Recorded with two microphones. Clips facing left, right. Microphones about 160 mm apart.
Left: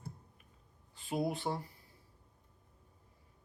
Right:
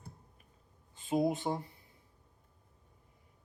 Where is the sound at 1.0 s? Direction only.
20° right (ahead or behind).